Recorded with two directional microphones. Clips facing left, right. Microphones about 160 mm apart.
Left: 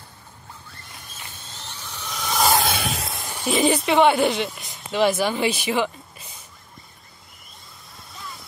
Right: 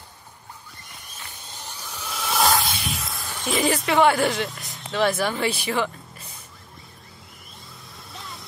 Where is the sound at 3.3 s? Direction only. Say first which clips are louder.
Left 3 dB; 10° left (ahead or behind).